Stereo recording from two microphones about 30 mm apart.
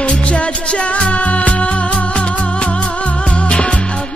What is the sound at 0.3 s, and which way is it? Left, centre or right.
Music, left.